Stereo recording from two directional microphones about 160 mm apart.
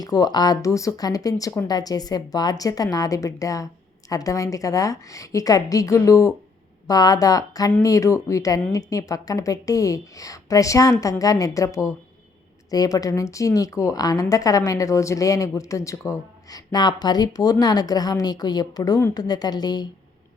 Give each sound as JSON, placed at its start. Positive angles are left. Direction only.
{"t": 0.0, "sound": "speech", "side_deg": 25}